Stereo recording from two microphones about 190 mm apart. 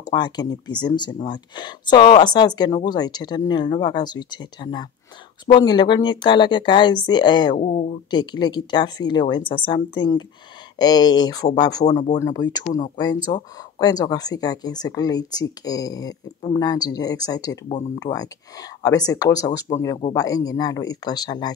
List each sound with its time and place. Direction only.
0.1 s speech: 20° left (ahead or behind)
7.5 s speech: 35° left (ahead or behind)
8.1 s speech: 20° left (ahead or behind)